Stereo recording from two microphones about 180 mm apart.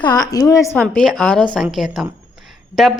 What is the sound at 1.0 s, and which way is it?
A woman's voice, 5° left (ahead or behind).